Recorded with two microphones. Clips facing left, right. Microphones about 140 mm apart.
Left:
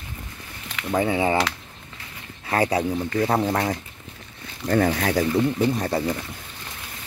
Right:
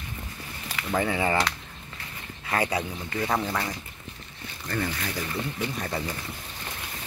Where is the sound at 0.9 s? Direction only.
20° left (ahead or behind).